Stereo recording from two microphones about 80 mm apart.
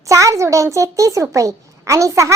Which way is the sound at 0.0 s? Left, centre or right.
Right.